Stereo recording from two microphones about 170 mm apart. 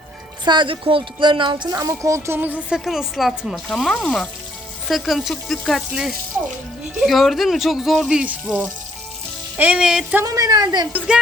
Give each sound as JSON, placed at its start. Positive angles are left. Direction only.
{"t": 0.4, "sound": "speech", "side_deg": -25}
{"t": 9.6, "sound": "music", "side_deg": -5}
{"t": 10.2, "sound": "speech", "side_deg": -20}
{"t": 10.9, "sound": "music", "side_deg": -5}